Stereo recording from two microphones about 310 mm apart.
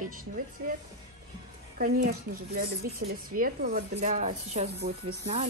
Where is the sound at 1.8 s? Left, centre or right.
Right.